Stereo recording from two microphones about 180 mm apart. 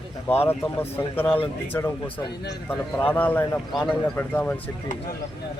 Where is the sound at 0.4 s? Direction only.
10° left (ahead or behind).